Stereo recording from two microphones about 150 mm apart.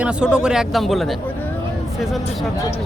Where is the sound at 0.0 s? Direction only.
5° right (ahead or behind).